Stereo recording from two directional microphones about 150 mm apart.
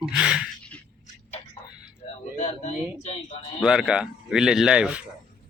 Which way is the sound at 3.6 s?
5° right (ahead or behind).